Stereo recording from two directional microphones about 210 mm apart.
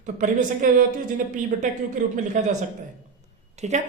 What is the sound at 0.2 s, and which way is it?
A woman's voice, 35° right (ahead or behind).